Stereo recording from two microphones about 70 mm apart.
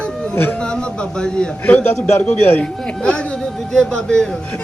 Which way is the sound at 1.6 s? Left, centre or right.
Left.